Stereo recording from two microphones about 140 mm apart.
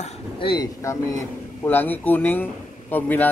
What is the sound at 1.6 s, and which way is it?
Speech, 15° left (ahead or behind).